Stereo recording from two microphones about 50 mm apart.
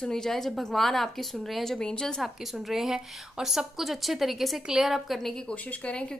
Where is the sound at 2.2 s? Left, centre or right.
Centre.